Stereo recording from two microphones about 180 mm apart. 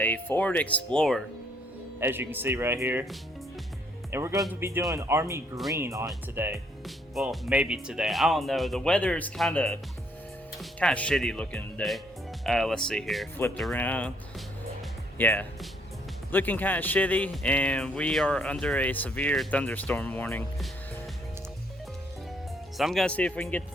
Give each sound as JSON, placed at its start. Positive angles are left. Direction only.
{"t": 0.0, "sound": "speech", "side_deg": 10}
{"t": 2.0, "sound": "speech", "side_deg": -10}
{"t": 4.1, "sound": "speech", "side_deg": -15}
{"t": 6.8, "sound": "speech", "side_deg": 0}
{"t": 22.8, "sound": "speech", "side_deg": 0}